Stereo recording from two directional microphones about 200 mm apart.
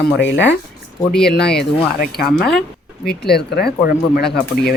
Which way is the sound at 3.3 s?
55° left (ahead or behind).